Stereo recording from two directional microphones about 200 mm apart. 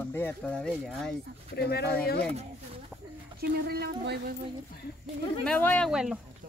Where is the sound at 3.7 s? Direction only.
50° right (ahead or behind).